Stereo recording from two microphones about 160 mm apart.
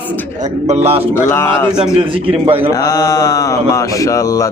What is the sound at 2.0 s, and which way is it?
Speech, 35° right (ahead or behind).